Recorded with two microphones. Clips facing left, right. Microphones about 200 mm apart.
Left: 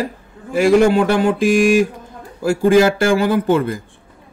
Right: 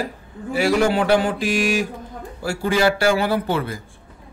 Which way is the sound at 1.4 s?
50° left (ahead or behind).